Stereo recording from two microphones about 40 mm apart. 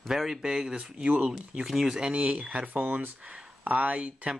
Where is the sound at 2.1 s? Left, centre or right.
Right.